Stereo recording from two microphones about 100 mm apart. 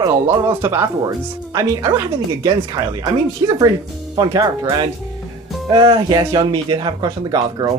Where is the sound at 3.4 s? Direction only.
45° right (ahead or behind).